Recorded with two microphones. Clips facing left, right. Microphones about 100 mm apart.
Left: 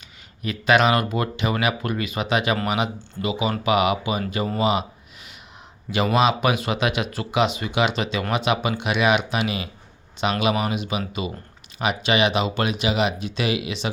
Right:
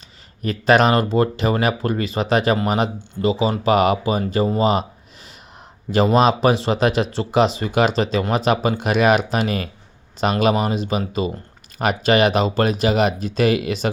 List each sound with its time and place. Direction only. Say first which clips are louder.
0.4 s speech: right 3 dB; 40° right (ahead or behind)
5.9 s speech: right 4 dB; 40° right (ahead or behind)